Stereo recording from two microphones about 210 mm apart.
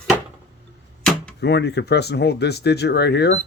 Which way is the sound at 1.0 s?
5° left (ahead or behind).